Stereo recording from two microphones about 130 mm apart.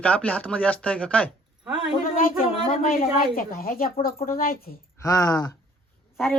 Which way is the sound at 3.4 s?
90° left.